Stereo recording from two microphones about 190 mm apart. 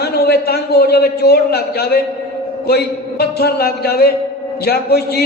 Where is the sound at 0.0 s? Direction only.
60° left (ahead or behind).